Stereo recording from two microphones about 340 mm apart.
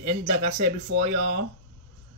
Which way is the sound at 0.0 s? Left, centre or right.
Right.